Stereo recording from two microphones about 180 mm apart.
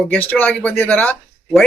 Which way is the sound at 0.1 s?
10° left (ahead or behind).